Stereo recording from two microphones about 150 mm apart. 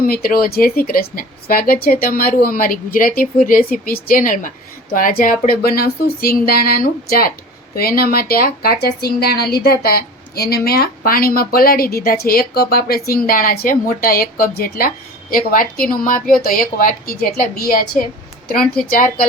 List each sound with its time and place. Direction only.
0.1 s speech: 85° left; by 5.4 s 65° left (ahead or behind)
5.5 s a woman's voice: 90° left